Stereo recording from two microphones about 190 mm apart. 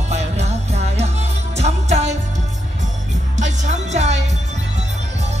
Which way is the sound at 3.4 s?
40° right (ahead or behind).